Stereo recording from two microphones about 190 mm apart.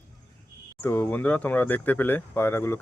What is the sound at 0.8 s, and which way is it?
Speech, 10° left (ahead or behind).